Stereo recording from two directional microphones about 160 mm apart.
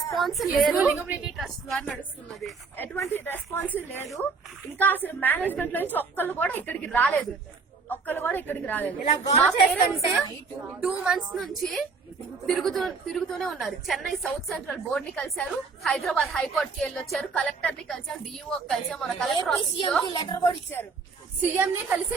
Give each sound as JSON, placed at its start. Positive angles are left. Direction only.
{"t": 0.1, "sound": "a woman's voice", "side_deg": 0}
{"t": 1.4, "sound": "a woman's voice", "side_deg": 0}
{"t": 2.7, "sound": "a woman's voice", "side_deg": 10}
{"t": 9.0, "sound": "a woman's voice", "side_deg": 45}
{"t": 9.4, "sound": "a woman's voice", "side_deg": 0}
{"t": 20.1, "sound": "a woman's voice", "side_deg": 25}
{"t": 21.5, "sound": "a woman's voice", "side_deg": -15}